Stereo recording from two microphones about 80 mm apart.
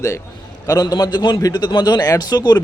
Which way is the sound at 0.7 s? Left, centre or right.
Left.